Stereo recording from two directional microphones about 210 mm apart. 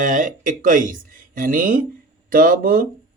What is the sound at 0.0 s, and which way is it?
Speech, 40° right (ahead or behind).